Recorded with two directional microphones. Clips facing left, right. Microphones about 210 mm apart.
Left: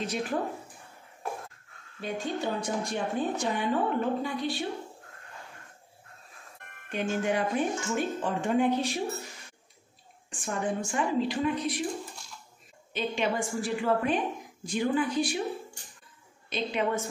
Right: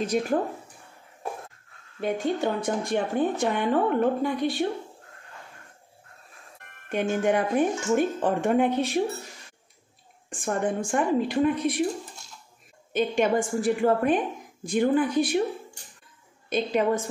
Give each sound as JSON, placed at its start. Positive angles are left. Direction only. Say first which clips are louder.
{"t": 0.0, "sound": "a woman's voice", "louder": "right 6 dB", "side_deg": -45}
{"t": 2.0, "sound": "speech", "louder": "right 6 dB", "side_deg": -55}
{"t": 6.9, "sound": "a woman's voice", "louder": "right 5 dB", "side_deg": -55}
{"t": 10.3, "sound": "a woman's voice", "louder": "right 4 dB", "side_deg": -55}
{"t": 12.9, "sound": "a woman's voice", "louder": "right 7 dB", "side_deg": -50}
{"t": 16.4, "sound": "a woman's voice", "louder": "right 6 dB", "side_deg": -50}